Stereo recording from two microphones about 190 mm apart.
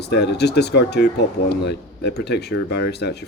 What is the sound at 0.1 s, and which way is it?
Speech, 60° left (ahead or behind).